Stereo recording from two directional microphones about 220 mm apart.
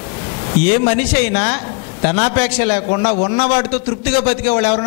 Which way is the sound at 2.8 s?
25° left (ahead or behind).